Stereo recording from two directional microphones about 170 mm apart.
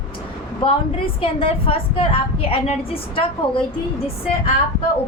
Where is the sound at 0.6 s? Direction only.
25° left (ahead or behind).